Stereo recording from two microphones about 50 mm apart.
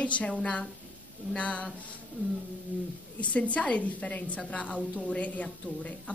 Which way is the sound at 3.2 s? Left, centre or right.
Left.